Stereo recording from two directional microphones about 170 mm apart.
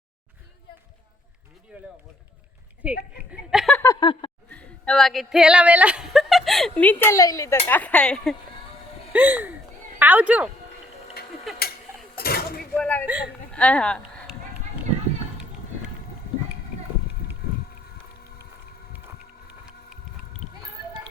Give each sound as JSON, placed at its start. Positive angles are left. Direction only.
{"t": 1.7, "sound": "a woman's voice", "side_deg": -5}
{"t": 3.5, "sound": "a sound", "side_deg": 0}
{"t": 4.0, "sound": "speech", "side_deg": 30}
{"t": 4.4, "sound": "female singing", "side_deg": 5}
{"t": 7.7, "sound": "speech", "side_deg": 10}
{"t": 9.1, "sound": "a woman's voice", "side_deg": -10}
{"t": 11.5, "sound": "a sound", "side_deg": 0}
{"t": 12.1, "sound": "a sound", "side_deg": 65}
{"t": 12.7, "sound": "speech", "side_deg": 10}
{"t": 13.1, "sound": "a woman's voice", "side_deg": -10}
{"t": 13.5, "sound": "speech", "side_deg": 5}